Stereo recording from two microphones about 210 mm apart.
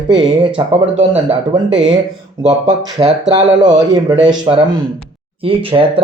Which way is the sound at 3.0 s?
20° right (ahead or behind).